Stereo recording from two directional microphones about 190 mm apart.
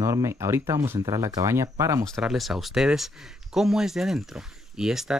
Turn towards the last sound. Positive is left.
turn(degrees=-5)  # may be behind; listen again after turning